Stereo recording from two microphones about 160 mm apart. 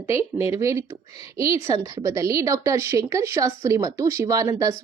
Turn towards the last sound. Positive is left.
turn(degrees=-20)  # may be behind; listen again after turning